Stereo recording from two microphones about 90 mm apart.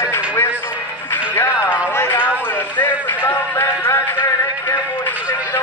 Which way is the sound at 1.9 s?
25° left (ahead or behind).